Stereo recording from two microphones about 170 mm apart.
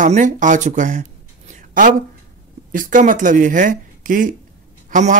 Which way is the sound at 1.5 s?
50° right (ahead or behind).